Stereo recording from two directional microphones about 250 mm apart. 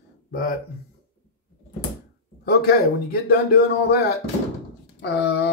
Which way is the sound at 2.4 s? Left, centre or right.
Left.